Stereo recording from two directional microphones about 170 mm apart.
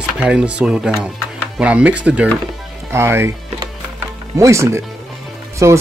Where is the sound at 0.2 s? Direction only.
5° right (ahead or behind).